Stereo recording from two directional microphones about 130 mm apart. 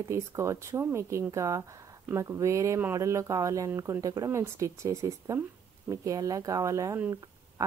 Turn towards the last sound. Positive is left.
turn(degrees=-25)  # may be behind; listen again after turning